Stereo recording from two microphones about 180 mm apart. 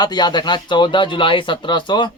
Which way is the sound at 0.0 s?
25° left (ahead or behind).